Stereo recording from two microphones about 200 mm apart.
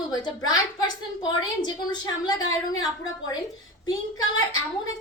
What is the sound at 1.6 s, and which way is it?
A woman's voice, 20° left (ahead or behind).